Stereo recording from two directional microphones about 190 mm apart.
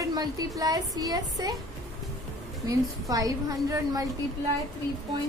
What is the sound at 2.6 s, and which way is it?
Speech, 20° right (ahead or behind).